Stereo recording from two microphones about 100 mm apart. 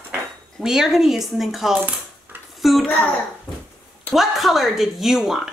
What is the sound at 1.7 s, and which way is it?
Dishes, 15° right (ahead or behind).